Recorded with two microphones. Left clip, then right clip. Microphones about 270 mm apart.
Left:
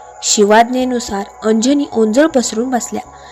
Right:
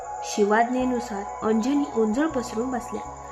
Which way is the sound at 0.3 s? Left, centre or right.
Left.